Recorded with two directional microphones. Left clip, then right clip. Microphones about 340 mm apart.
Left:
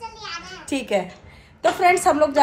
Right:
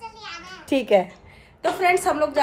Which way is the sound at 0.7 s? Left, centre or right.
Right.